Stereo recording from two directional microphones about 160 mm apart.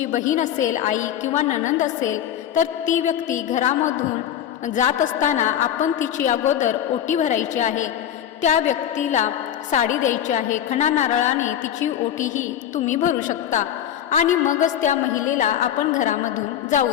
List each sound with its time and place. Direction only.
0.1 s a woman's voice: 50° left (ahead or behind)